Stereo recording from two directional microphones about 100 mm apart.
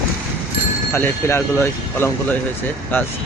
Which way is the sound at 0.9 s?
20° left (ahead or behind).